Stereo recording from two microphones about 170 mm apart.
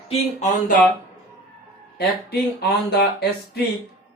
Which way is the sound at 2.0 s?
70° left (ahead or behind).